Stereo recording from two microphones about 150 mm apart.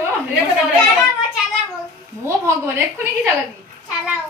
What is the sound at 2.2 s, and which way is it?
Speech, 20° right (ahead or behind).